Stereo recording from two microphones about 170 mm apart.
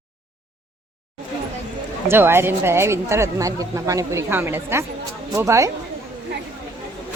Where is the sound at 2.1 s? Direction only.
15° right (ahead or behind).